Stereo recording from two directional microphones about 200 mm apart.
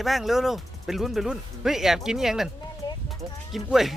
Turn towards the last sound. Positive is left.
turn(degrees=0)  # may be behind; listen again after turning